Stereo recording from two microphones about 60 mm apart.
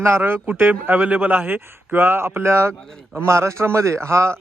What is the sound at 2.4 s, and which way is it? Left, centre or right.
A man's voice, right.